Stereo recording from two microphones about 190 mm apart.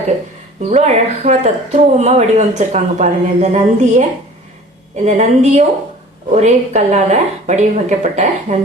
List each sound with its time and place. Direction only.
0.7 s speech: 35° right (ahead or behind)
5.0 s speech: 35° right (ahead or behind)